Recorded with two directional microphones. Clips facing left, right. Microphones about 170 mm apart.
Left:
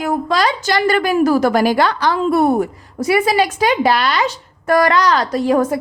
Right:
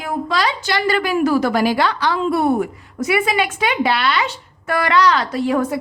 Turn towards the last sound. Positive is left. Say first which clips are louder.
# left 3 dB
turn(degrees=40)  # may be behind; listen again after turning